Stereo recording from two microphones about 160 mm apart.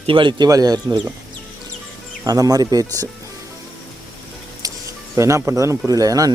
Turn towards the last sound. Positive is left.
turn(degrees=-20)  # may be behind; listen again after turning